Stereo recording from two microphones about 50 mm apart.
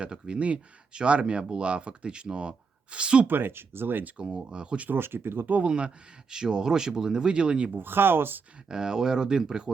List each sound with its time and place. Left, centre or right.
0.0 s speech: right
3.2 s speech: right
4.2 s speech: right
4.9 s speech: right
5.6 s speech: right
7.7 s speech: right
8.7 s speech: centre